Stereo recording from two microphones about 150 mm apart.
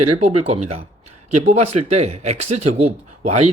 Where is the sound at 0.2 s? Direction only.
50° right (ahead or behind).